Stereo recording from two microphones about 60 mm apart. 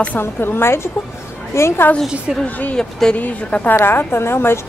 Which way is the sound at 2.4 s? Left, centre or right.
Left.